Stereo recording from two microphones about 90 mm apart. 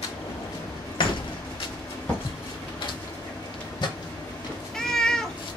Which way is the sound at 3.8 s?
55° left (ahead or behind).